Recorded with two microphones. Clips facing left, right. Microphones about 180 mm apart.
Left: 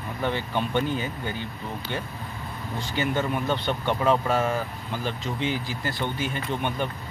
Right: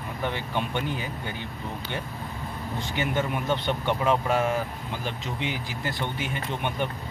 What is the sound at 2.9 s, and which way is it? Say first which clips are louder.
Speech: left 2 dB; 20° right (ahead or behind).